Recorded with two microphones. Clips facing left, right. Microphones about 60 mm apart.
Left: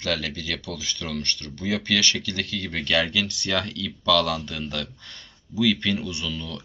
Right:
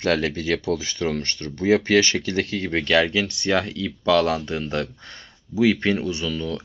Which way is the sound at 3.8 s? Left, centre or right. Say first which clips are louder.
Right 1 dB; right.